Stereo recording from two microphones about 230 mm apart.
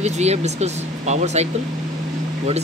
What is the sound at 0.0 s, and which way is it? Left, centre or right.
Speech, right.